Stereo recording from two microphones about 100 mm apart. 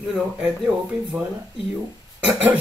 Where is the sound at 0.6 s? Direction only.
5° right (ahead or behind).